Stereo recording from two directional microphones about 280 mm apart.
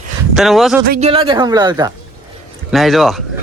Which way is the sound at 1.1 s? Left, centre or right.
Centre.